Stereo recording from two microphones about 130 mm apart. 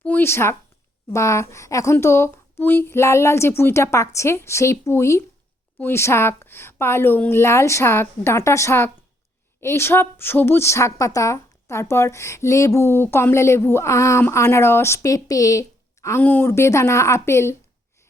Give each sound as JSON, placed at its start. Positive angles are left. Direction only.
{"t": 0.0, "sound": "a woman's voice", "side_deg": 15}